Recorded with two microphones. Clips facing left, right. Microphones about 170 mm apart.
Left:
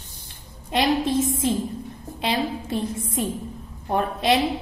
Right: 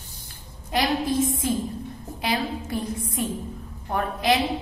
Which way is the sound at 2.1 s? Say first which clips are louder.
Left 2 dB; 25° left (ahead or behind).